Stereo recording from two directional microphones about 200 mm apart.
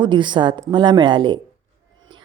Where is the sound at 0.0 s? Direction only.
25° right (ahead or behind).